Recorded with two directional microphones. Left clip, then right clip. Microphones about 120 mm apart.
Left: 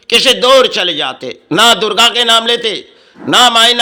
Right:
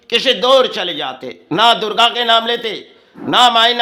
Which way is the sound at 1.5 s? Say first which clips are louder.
Left 3 dB; 40° left (ahead or behind).